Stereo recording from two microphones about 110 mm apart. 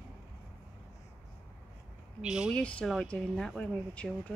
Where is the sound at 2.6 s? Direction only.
10° left (ahead or behind).